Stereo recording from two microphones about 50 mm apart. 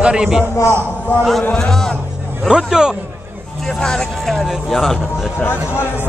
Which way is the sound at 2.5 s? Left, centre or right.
Centre.